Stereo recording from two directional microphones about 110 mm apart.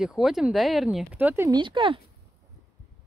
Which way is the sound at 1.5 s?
45° right (ahead or behind).